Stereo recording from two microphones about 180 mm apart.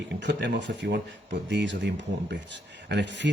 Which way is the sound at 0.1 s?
70° right (ahead or behind).